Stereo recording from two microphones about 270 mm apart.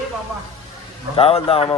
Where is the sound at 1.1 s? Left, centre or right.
Left.